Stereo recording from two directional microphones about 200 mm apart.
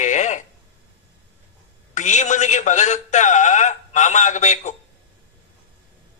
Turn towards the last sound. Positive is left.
turn(degrees=35)  # may be behind; listen again after turning